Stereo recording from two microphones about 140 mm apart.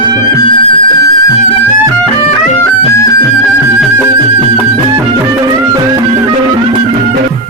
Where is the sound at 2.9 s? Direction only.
25° left (ahead or behind).